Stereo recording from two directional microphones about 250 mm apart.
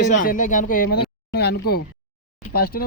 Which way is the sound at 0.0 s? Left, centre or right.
Left.